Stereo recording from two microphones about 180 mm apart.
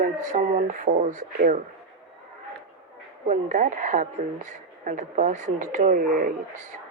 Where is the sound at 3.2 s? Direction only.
45° right (ahead or behind).